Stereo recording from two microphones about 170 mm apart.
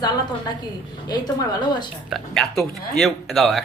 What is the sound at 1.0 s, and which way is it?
Speech, 25° left (ahead or behind).